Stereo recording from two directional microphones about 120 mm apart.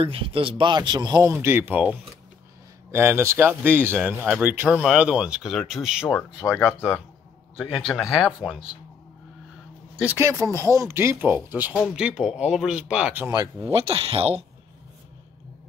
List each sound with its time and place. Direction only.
0.0 s speech: 50° right (ahead or behind)
1.2 s speech: 20° right (ahead or behind); by 6.1 s 5° right (ahead or behind)
6.4 s speech: 20° left (ahead or behind)
7.5 s speech: centre (ahead or behind)
10.1 s speech: 25° right (ahead or behind)
11.9 s speech: 5° right (ahead or behind)
13.3 s speech: 30° right (ahead or behind)
13.7 s speech: 50° right (ahead or behind)